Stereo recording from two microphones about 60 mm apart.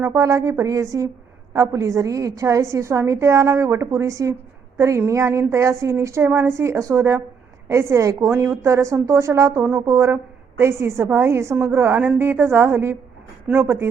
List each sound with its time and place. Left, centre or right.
0.0 s a woman's voice: right
10.6 s a woman's voice: right